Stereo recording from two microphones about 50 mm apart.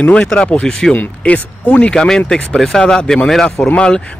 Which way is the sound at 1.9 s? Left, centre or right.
Centre.